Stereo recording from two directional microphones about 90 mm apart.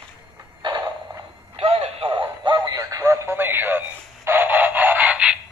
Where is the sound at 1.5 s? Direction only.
90° right.